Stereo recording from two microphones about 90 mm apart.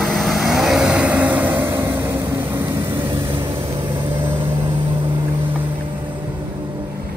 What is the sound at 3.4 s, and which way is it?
Vehicle, 80° right.